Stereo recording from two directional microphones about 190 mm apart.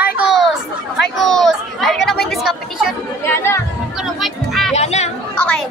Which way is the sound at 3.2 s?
15° left (ahead or behind).